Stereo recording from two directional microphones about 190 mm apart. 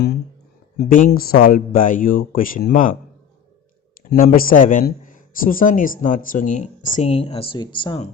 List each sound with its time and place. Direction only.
0.8 s speech: 45° left (ahead or behind)
4.2 s speech: 50° left (ahead or behind); by 8.0 s 25° left (ahead or behind)